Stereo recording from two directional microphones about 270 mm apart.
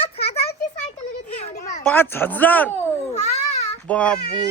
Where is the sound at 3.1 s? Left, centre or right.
Left.